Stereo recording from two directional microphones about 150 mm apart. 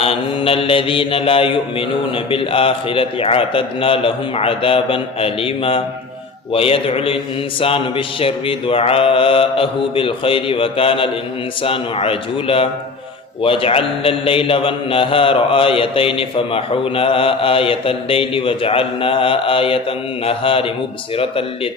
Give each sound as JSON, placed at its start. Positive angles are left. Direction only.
{"t": 0.0, "sound": "speech", "side_deg": 40}